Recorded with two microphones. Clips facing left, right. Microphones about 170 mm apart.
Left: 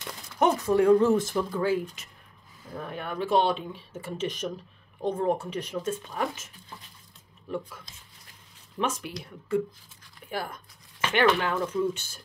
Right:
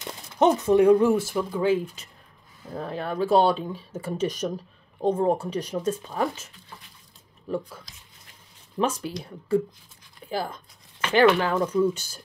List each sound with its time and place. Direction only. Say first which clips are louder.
0.0 s speech: right 4 dB; 25° right (ahead or behind)
2.7 s speech: right 5 dB; 30° right (ahead or behind)
11.3 s speech: right 4 dB; 40° right (ahead or behind)